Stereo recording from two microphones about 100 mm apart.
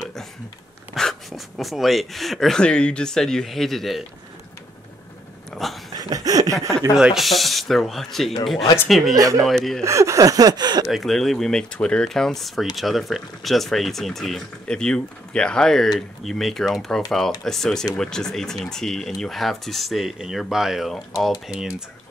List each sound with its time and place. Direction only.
0.0 s a sound: 5° left (ahead or behind)
0.9 s speech: centre (ahead or behind)
5.5 s a sound: centre (ahead or behind)
5.9 s a sound: 40° right (ahead or behind)
7.0 s speech: 5° right (ahead or behind)
9.1 s speech: 35° right (ahead or behind)
9.4 s speech: 5° left (ahead or behind)
9.8 s speech: 30° right (ahead or behind)
10.9 s speech: centre (ahead or behind)